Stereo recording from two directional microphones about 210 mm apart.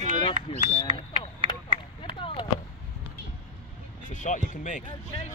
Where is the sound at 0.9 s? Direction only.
25° left (ahead or behind).